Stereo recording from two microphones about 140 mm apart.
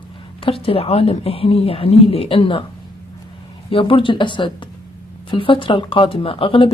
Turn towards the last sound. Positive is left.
turn(degrees=40)  # may be behind; listen again after turning